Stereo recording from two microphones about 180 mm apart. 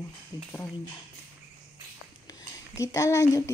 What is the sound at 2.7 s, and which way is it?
Speech, 15° left (ahead or behind).